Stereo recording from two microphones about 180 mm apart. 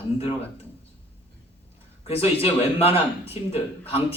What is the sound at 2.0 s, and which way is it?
Speech, 35° left (ahead or behind).